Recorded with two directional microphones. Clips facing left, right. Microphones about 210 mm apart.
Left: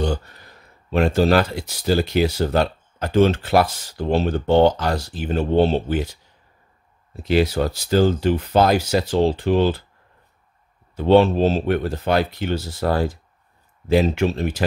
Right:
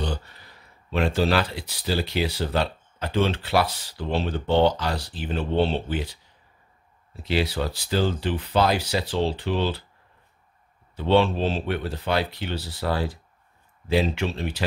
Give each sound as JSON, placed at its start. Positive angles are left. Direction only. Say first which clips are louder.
{"t": 0.0, "sound": "speech", "louder": "left 7 dB", "side_deg": 45}
{"t": 7.2, "sound": "speech", "louder": "left 6 dB", "side_deg": 45}
{"t": 11.0, "sound": "speech", "louder": "left 6 dB", "side_deg": 45}